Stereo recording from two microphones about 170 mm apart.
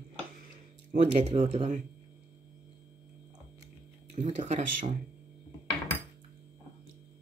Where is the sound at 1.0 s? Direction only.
40° right (ahead or behind).